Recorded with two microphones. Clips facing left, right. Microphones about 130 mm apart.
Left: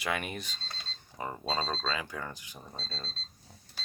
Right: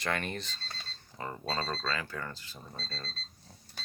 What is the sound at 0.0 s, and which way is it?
Speech, 10° left (ahead or behind).